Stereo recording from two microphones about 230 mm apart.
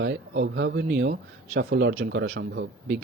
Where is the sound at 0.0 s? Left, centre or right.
Right.